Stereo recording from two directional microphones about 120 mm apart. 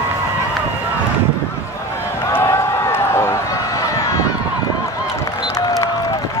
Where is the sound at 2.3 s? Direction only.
20° left (ahead or behind).